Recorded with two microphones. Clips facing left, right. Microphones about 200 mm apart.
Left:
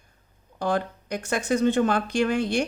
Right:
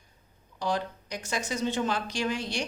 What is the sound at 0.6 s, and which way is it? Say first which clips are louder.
Speech: left 4 dB; 55° left (ahead or behind).